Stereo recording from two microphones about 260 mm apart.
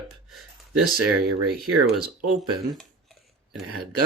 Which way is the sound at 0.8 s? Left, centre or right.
Right.